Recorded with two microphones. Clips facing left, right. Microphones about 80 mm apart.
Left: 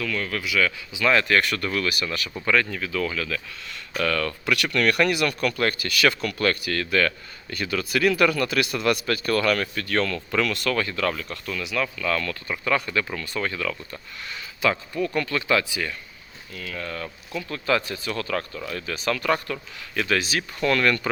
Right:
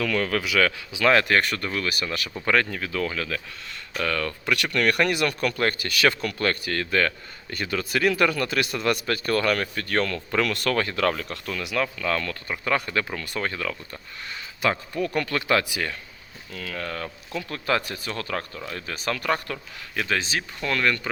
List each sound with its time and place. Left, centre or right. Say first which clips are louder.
0.0 s speech: right 4 dB; right
1.0 s speech: right 2 dB; right
1.3 s speech: left 1 dB; right
2.0 s speech: left 1 dB; right
4.0 s speech: left 2 dB; centre
10.5 s speech: right 1 dB; right
11.8 s speech: even; right
14.6 s speech: left 1 dB; right
16.5 s speech: right 1 dB; right
18.1 s speech: left 3 dB; right
18.9 s speech: left 2 dB; right
19.9 s speech: left 2 dB; right
20.6 s speech: left 4 dB; centre